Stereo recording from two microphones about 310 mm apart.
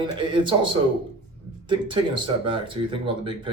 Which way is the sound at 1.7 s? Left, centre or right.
Centre.